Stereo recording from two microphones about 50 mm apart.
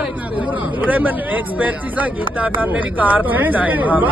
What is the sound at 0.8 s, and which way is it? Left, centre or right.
Speech, right.